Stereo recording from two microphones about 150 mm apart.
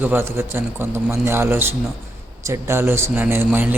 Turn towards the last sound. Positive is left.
turn(degrees=-10)  # may be behind; listen again after turning